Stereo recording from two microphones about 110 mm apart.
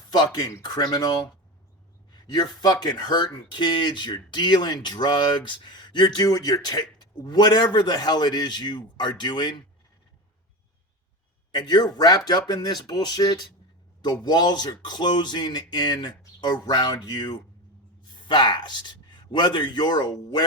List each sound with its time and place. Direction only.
0.1 s a man's voice: 40° left (ahead or behind)
11.5 s a man's voice: 40° left (ahead or behind)